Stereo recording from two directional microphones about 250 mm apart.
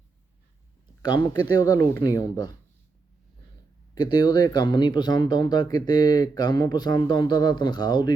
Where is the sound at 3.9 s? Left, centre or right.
Centre.